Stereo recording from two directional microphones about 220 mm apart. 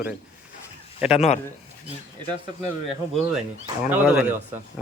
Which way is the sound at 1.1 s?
30° left (ahead or behind).